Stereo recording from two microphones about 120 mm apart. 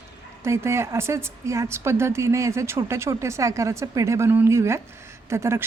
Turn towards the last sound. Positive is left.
turn(degrees=-25)  # may be behind; listen again after turning